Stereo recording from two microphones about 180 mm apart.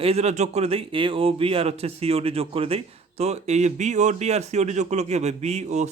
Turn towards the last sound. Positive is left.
turn(degrees=-40)  # may be behind; listen again after turning